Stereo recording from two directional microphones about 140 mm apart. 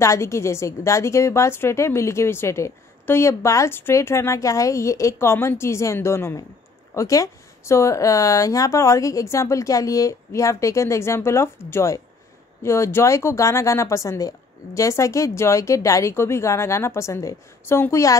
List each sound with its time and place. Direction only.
0.0 s a woman's voice: 20° left (ahead or behind)